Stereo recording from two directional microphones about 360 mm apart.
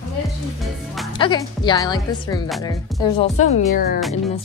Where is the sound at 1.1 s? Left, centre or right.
Centre.